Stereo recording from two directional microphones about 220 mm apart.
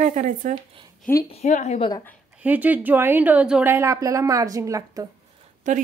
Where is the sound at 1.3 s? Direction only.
30° left (ahead or behind).